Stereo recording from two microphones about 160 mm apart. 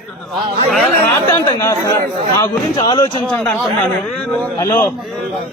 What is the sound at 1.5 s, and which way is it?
Speech, 20° left (ahead or behind).